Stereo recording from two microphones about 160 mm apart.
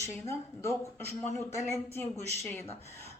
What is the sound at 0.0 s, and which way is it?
Speech, 15° left (ahead or behind).